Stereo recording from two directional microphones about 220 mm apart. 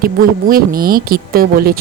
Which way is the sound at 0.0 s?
40° right (ahead or behind).